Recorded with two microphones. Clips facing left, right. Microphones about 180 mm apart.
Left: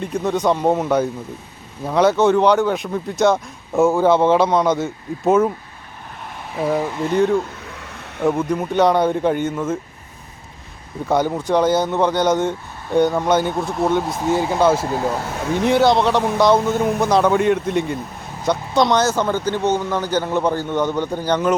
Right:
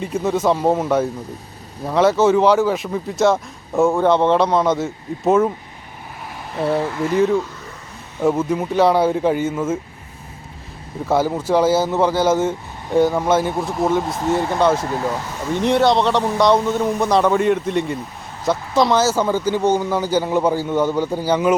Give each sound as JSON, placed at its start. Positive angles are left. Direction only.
{"t": 0.0, "sound": "speech", "side_deg": -5}
{"t": 11.0, "sound": "speech", "side_deg": -5}